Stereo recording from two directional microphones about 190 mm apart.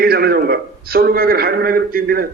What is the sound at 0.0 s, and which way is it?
A man's voice, 55° right (ahead or behind).